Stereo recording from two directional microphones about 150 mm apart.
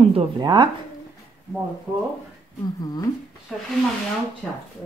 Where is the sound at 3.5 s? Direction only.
Centre (ahead or behind).